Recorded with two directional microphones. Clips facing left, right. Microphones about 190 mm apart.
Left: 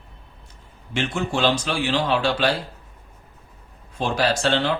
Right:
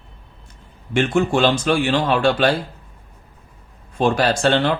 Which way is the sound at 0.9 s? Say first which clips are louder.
Right 7 dB; 55° right (ahead or behind).